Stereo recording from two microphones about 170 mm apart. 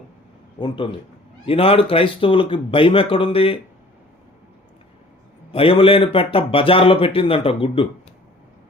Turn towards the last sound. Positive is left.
turn(degrees=35)  # may be behind; listen again after turning